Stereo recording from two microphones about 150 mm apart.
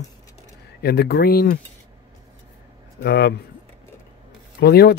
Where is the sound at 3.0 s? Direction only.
90° left.